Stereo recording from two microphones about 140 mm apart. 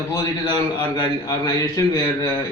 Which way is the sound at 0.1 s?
25° left (ahead or behind).